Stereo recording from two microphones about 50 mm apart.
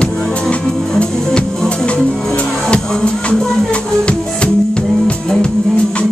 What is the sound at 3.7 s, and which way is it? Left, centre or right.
Music, left.